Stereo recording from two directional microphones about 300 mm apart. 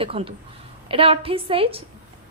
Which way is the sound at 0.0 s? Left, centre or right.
Centre.